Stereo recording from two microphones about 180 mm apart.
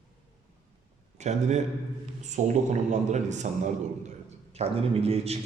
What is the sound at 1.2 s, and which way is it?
A man's voice, 40° right (ahead or behind).